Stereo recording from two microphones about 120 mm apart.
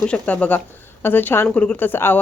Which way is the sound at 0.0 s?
10° left (ahead or behind).